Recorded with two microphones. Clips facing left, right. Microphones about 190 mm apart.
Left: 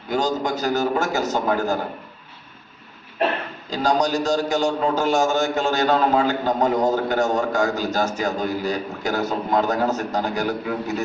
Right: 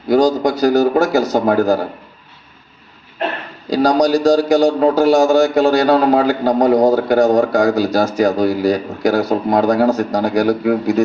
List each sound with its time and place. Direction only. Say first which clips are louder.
0.1 s a man's voice: right 9 dB; 35° right (ahead or behind)
3.7 s a man's voice: right 8 dB; 35° right (ahead or behind)